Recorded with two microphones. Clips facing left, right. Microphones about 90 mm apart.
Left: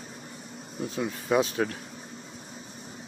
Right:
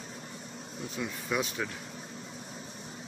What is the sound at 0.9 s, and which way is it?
Speech, 35° left (ahead or behind).